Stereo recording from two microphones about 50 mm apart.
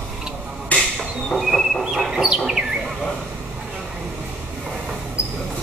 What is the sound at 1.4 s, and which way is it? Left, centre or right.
Vehicle, centre.